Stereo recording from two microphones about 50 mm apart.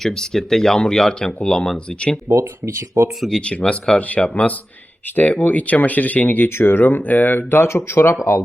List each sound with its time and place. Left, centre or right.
0.0 s speech: centre
2.3 s speech: right
3.4 s speech: left